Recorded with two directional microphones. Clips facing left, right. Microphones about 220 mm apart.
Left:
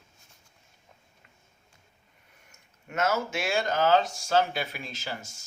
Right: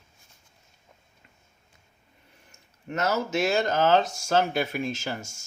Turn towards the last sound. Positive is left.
turn(degrees=-45)  # may be behind; listen again after turning